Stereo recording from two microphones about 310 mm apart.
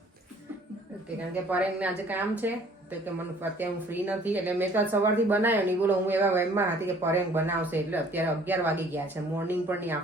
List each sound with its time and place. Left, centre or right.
1.5 s a woman's voice: centre
3.6 s speech: centre